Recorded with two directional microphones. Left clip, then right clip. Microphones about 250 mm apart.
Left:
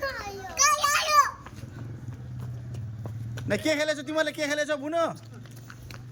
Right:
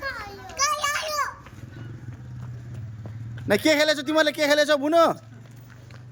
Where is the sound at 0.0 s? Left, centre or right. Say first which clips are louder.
Even; centre.